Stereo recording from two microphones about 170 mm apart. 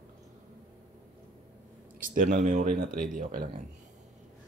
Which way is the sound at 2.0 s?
55° right (ahead or behind).